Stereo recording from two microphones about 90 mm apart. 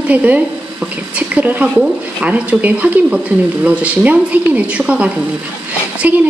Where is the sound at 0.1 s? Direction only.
15° right (ahead or behind).